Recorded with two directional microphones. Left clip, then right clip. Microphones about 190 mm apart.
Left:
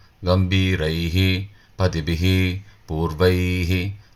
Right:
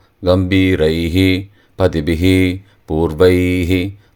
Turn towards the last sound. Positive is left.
turn(degrees=-45)  # may be behind; listen again after turning